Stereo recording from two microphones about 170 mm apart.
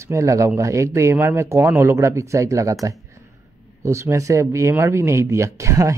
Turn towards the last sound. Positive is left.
turn(degrees=-15)  # may be behind; listen again after turning